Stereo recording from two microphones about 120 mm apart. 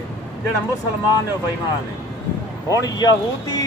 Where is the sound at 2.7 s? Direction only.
30° left (ahead or behind).